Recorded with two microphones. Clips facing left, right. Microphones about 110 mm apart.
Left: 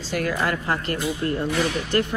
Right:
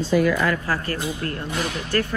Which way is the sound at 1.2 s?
15° left (ahead or behind).